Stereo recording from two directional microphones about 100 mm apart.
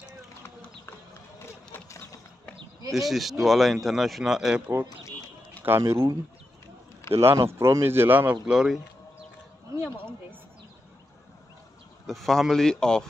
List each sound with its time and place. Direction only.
2.9 s speech: centre (ahead or behind)
5.6 s speech: 25° right (ahead or behind)
8.5 s speech: 5° right (ahead or behind)
12.1 s speech: 5° left (ahead or behind)